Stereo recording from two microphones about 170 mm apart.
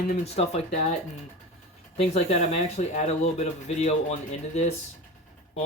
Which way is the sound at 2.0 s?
35° left (ahead or behind).